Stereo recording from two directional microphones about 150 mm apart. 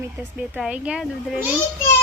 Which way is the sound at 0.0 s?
10° right (ahead or behind).